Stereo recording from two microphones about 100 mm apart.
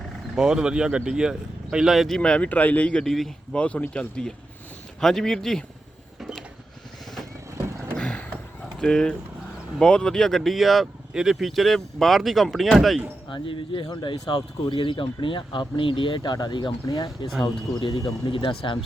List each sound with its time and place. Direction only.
0.3 s speech: 5° right (ahead or behind)
6.1 s creak: 5° right (ahead or behind)
7.9 s vehicle: 10° left (ahead or behind)
8.8 s speech: 5° left (ahead or behind)
13.3 s speech: 60° left (ahead or behind)
13.8 s speech: 50° left (ahead or behind)